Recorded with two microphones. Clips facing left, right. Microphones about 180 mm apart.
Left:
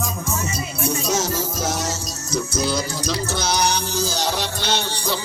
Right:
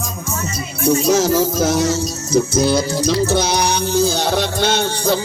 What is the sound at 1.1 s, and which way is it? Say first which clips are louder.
Music: right 8 dB; 60° right (ahead or behind).